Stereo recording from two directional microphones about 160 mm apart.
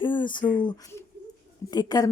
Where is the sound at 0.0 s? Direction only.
30° left (ahead or behind).